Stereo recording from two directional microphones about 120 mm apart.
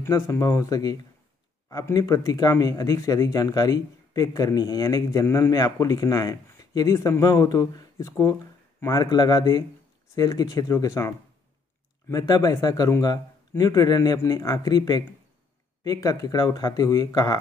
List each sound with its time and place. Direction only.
0.0 s speech: 25° left (ahead or behind)